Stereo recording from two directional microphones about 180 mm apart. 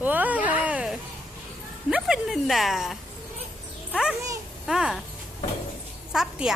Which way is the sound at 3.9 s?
Centre (ahead or behind).